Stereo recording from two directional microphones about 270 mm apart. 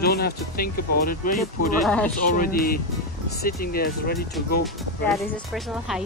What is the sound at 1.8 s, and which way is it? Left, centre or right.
Speech, centre.